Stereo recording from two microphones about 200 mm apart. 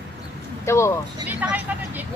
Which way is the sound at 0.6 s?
15° left (ahead or behind).